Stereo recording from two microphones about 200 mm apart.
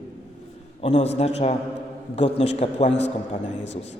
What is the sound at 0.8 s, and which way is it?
A man's voice, 30° left (ahead or behind).